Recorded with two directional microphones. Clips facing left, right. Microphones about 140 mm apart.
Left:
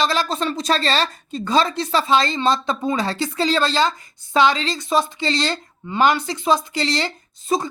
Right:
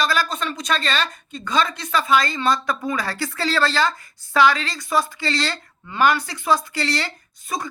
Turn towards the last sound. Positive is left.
turn(degrees=25)  # may be behind; listen again after turning